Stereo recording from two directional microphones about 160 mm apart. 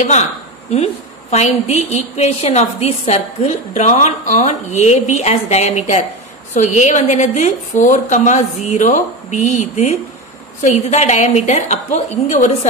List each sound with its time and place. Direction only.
0.0 s a woman's voice: 45° left (ahead or behind)